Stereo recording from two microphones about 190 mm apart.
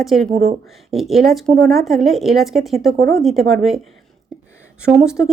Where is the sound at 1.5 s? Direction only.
50° right (ahead or behind).